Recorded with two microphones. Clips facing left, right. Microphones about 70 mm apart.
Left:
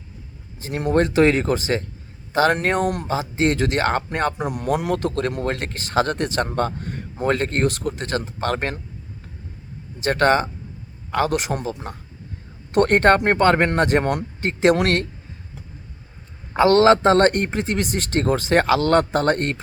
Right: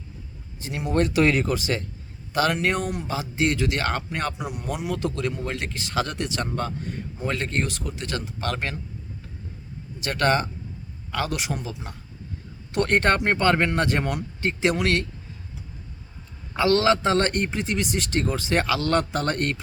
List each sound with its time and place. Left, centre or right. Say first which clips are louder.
0.6 s speech: left 6 dB; left
0.9 s a man's voice: left 4 dB; left
4.4 s speech: left 7 dB; left
10.0 s a man's voice: left 5 dB; left
16.6 s a man's voice: left 6 dB; left